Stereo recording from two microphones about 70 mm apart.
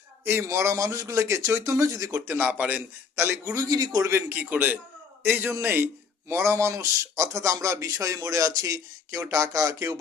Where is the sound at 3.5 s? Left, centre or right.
Right.